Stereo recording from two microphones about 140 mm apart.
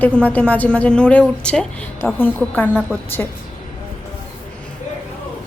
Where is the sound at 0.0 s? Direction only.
10° left (ahead or behind).